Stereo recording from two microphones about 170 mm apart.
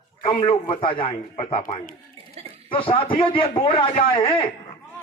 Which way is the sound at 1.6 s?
50° left (ahead or behind).